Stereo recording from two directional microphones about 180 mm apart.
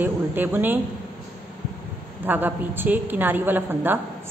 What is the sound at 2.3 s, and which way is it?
A woman's voice, 10° right (ahead or behind).